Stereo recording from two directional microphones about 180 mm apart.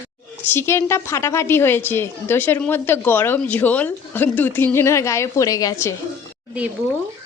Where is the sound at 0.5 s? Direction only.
15° left (ahead or behind).